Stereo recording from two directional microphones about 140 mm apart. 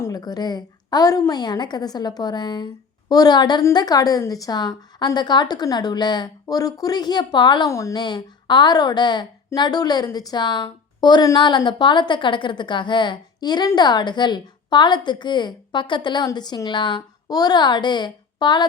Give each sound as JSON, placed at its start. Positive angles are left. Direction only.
{"t": 0.0, "sound": "a woman's voice", "side_deg": 25}
{"t": 7.7, "sound": "a woman's voice", "side_deg": 20}